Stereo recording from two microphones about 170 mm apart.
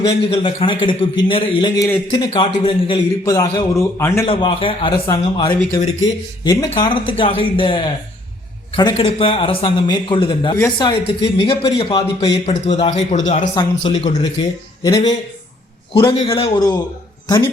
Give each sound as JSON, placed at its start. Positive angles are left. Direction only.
{"t": 0.0, "sound": "a man's voice", "side_deg": 35}
{"t": 4.3, "sound": "a man's voice", "side_deg": 30}
{"t": 14.4, "sound": "a man's voice", "side_deg": 25}
{"t": 15.9, "sound": "a man's voice", "side_deg": 30}